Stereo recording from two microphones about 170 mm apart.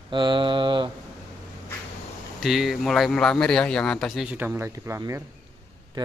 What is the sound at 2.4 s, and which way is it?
Speech, centre (ahead or behind).